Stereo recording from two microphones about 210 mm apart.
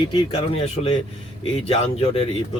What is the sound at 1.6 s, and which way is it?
Speech, 30° left (ahead or behind).